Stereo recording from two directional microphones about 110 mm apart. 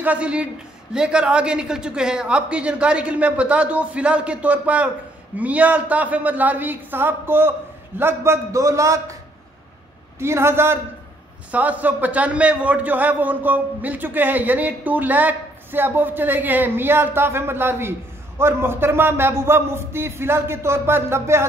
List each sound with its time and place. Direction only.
0.0 s a man's voice: 10° right (ahead or behind); by 9.1 s 30° right (ahead or behind)
10.1 s a man's voice: 25° right (ahead or behind)